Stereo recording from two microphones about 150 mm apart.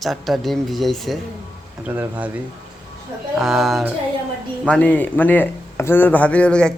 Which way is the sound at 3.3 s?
Centre (ahead or behind).